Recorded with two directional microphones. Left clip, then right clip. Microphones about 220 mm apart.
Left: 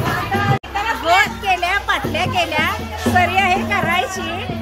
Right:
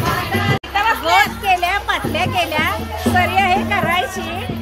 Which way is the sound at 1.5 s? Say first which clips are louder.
Right 1 dB; centre (ahead or behind).